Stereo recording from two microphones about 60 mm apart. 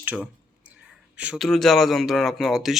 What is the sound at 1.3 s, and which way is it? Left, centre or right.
Speech, centre.